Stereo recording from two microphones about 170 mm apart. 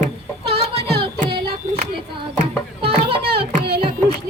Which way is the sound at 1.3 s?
35° right (ahead or behind).